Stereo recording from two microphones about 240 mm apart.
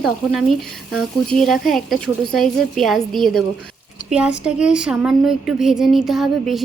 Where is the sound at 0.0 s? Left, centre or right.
Centre.